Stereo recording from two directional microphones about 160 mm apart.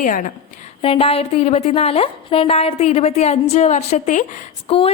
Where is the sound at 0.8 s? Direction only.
35° left (ahead or behind).